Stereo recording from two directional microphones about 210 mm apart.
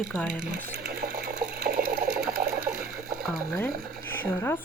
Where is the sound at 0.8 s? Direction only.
45° right (ahead or behind).